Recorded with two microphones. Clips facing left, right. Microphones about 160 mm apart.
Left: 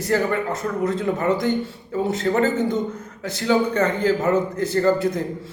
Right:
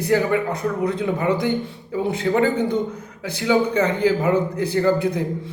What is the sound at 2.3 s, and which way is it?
A man's voice, 15° right (ahead or behind).